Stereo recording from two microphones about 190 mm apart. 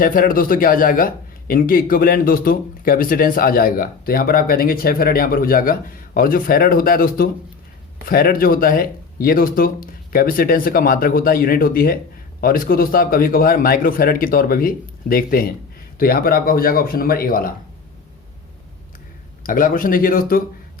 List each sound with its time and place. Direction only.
0.0 s speech: 50° left (ahead or behind)
19.4 s speech: 45° left (ahead or behind)